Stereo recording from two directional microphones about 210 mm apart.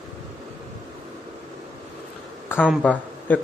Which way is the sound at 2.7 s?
5° left (ahead or behind).